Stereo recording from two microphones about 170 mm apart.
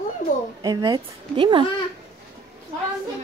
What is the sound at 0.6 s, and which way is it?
A woman's voice, 25° right (ahead or behind).